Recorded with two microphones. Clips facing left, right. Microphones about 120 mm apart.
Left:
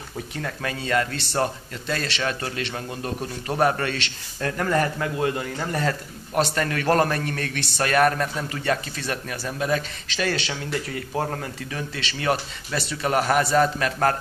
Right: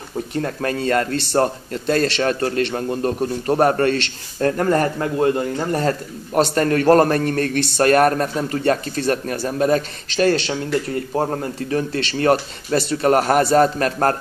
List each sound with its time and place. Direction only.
0.3 s speech: 40° right (ahead or behind)